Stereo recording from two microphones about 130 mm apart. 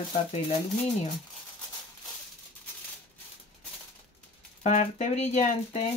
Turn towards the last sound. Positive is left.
turn(degrees=65)  # may be behind; listen again after turning